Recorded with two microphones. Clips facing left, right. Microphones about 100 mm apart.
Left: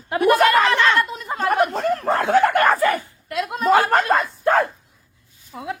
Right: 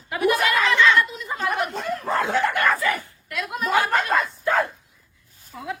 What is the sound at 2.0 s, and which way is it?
Dog, 60° left (ahead or behind).